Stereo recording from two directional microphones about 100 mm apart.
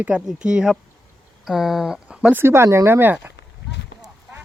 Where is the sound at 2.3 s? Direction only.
25° right (ahead or behind).